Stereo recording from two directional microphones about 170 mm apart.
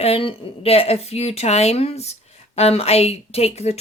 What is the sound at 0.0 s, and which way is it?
Speech, 35° left (ahead or behind).